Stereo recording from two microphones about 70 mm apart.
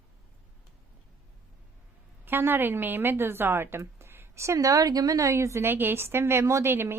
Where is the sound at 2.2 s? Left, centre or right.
Right.